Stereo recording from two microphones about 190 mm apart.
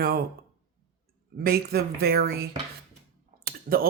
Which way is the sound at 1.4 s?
55° right (ahead or behind).